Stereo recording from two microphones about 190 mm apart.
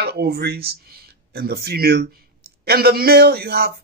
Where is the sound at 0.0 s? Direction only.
55° right (ahead or behind).